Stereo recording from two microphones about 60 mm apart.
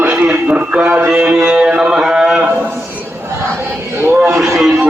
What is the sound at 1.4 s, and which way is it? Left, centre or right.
Music, centre.